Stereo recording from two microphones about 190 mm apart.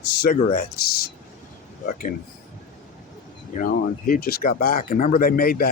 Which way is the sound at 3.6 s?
45° left (ahead or behind).